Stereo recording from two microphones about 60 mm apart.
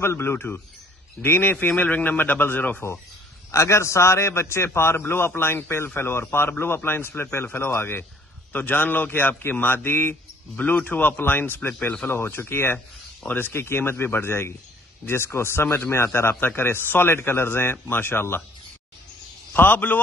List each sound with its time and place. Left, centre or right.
0.0 s a man's voice: left
3.5 s a man's voice: left
8.5 s a man's voice: left
10.5 s a man's voice: centre
10.9 s a man's voice: left
19.5 s a man's voice: left